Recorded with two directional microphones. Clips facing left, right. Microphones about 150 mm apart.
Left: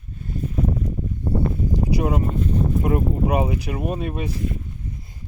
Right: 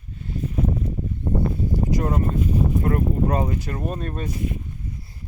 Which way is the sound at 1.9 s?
15° left (ahead or behind).